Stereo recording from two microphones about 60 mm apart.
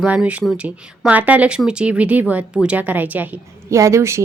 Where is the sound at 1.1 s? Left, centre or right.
Right.